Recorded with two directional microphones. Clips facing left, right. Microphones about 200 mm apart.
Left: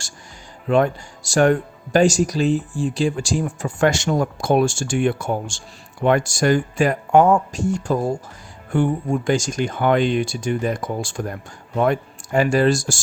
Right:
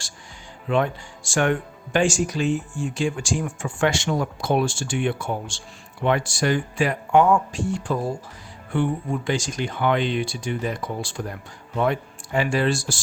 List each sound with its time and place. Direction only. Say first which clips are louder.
0.7 s speech: left 5 dB; 40° left (ahead or behind)